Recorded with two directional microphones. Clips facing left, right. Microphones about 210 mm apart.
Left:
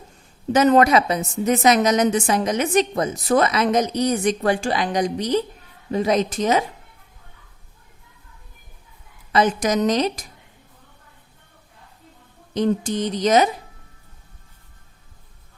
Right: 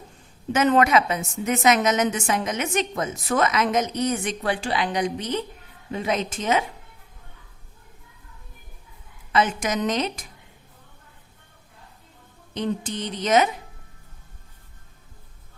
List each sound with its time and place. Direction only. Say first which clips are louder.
0.5 s a woman's voice: left 4 dB; 35° left (ahead or behind)
9.3 s a woman's voice: left 4 dB; 40° left (ahead or behind)
12.5 s a woman's voice: left 6 dB; 45° left (ahead or behind)